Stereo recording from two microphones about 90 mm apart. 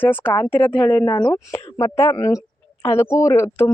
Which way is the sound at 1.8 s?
35° left (ahead or behind).